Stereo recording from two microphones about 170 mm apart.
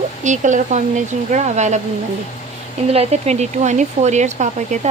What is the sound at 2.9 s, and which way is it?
Speech, 40° right (ahead or behind).